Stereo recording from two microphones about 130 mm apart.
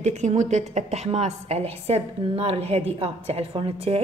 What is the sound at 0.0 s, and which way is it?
A woman's voice, 60° right (ahead or behind).